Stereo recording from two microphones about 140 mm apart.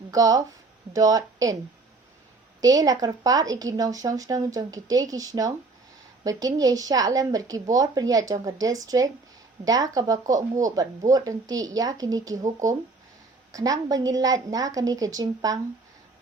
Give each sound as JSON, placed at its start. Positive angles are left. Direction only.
{"t": 0.1, "sound": "speech", "side_deg": -25}
{"t": 2.6, "sound": "speech", "side_deg": -25}